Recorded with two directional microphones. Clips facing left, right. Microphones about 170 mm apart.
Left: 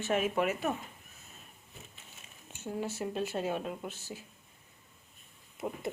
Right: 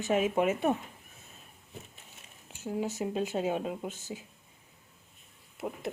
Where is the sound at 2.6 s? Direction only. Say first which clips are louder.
Right 3 dB; 15° right (ahead or behind).